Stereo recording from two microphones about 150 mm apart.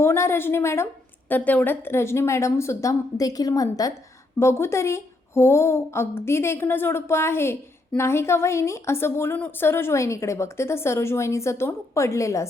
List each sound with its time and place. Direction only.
0.0 s a woman's voice: 15° left (ahead or behind)